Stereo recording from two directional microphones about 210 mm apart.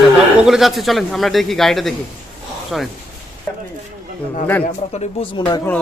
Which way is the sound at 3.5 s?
10° left (ahead or behind).